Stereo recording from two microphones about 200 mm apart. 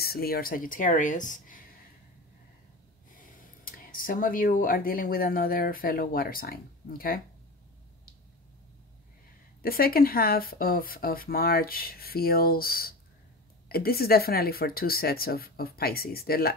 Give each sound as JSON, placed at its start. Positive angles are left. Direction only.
{"t": 0.0, "sound": "speech", "side_deg": 50}
{"t": 3.2, "sound": "speech", "side_deg": 45}
{"t": 9.6, "sound": "speech", "side_deg": 45}